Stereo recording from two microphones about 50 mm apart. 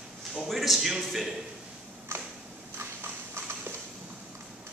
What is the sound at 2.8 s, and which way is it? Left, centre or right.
Clip-clop, right.